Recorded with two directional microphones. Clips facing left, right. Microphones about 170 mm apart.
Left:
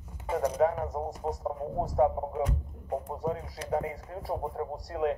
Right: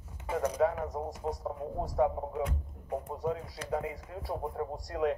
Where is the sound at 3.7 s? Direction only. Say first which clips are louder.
Left 3 dB; 40° left (ahead or behind).